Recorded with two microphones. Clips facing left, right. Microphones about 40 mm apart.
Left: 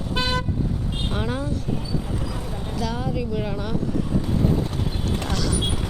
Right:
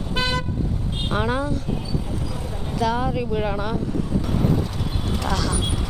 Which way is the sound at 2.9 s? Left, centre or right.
Right.